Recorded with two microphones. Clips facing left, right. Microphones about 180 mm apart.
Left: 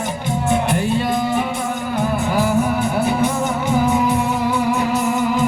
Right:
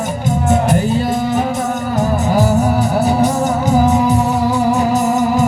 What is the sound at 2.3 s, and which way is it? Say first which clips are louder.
Music: right 4 dB; 40° right (ahead or behind).